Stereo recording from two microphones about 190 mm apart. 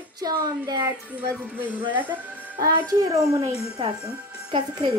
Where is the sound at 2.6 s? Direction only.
20° right (ahead or behind).